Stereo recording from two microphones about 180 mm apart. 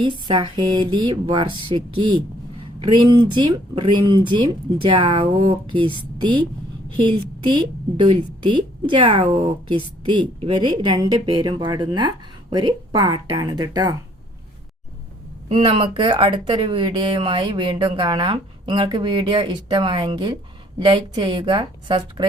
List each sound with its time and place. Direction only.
0.0 s speech: 25° right (ahead or behind)
15.4 s speech: 30° right (ahead or behind)